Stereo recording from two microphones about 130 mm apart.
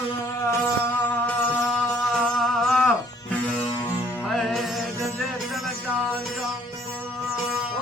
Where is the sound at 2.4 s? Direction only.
Centre (ahead or behind).